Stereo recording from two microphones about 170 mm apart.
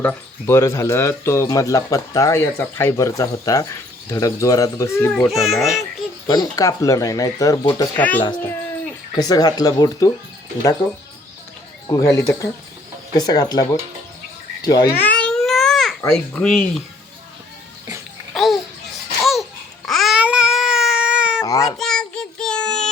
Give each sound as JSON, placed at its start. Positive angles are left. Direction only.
{"t": 0.0, "sound": "speech", "side_deg": 10}
{"t": 5.4, "sound": "speech", "side_deg": 0}
{"t": 6.2, "sound": "speech", "side_deg": 25}
{"t": 7.9, "sound": "speech", "side_deg": 10}
{"t": 9.1, "sound": "speech", "side_deg": 25}
{"t": 11.9, "sound": "speech", "side_deg": 20}
{"t": 15.0, "sound": "babbling", "side_deg": 10}
{"t": 16.1, "sound": "speech", "side_deg": 5}
{"t": 18.3, "sound": "babbling", "side_deg": 0}
{"t": 21.4, "sound": "babbling", "side_deg": 20}
{"t": 21.8, "sound": "child singing", "side_deg": 5}